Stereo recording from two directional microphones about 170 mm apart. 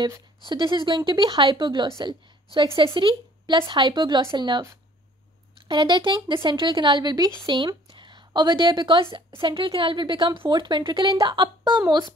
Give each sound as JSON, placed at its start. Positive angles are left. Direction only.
{"t": 0.5, "sound": "speech", "side_deg": -30}
{"t": 5.7, "sound": "speech", "side_deg": -25}